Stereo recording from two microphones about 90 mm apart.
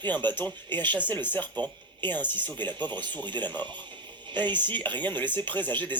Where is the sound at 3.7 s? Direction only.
60° right (ahead or behind).